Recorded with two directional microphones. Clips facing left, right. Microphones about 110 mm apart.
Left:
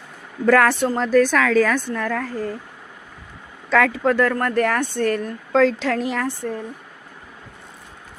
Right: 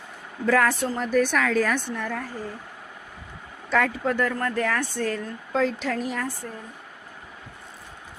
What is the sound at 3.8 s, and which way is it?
A woman's voice, 90° left.